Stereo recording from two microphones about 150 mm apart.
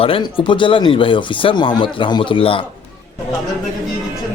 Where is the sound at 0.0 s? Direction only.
35° left (ahead or behind).